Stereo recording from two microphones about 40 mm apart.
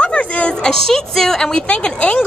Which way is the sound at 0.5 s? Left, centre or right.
Centre.